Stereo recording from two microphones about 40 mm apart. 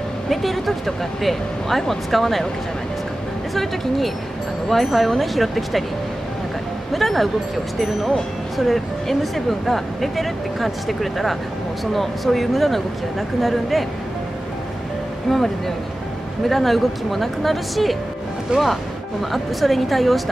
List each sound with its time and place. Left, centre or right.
0.3 s speech: centre
4.6 s speech: centre
6.9 s speech: centre
15.2 s speech: centre
18.5 s speech: right
19.3 s speech: centre